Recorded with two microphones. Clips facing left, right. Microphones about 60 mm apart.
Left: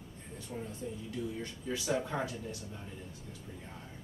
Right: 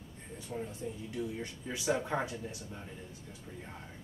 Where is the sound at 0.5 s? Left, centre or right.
Centre.